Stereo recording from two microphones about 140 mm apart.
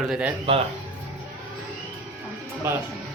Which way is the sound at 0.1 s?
10° right (ahead or behind).